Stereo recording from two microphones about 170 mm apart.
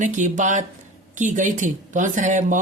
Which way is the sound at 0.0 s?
50° right (ahead or behind).